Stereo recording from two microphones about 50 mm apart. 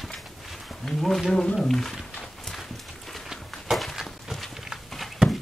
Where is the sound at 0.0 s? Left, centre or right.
Centre.